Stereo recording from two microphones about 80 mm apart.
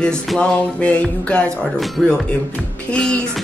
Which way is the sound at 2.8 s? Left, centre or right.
Centre.